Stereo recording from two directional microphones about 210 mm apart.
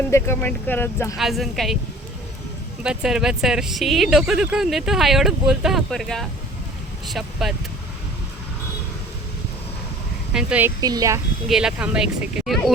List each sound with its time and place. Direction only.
0.1 s speech: 10° left (ahead or behind)
1.2 s speech: centre (ahead or behind)
2.8 s speech: 5° right (ahead or behind)
10.3 s speech: 5° right (ahead or behind)
10.8 s speech: 15° right (ahead or behind)
11.4 s speech: 5° right (ahead or behind)